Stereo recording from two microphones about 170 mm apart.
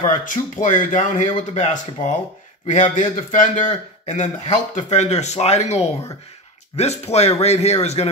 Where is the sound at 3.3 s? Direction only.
50° left (ahead or behind).